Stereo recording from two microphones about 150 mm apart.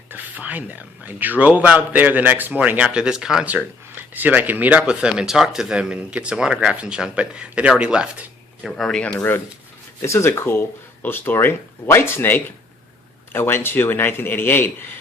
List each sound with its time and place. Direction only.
0.1 s a man's voice: 10° right (ahead or behind)
8.7 s speech: 5° left (ahead or behind)